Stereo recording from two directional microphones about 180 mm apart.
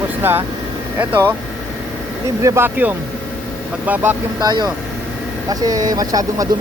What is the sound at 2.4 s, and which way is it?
Speech, 15° right (ahead or behind).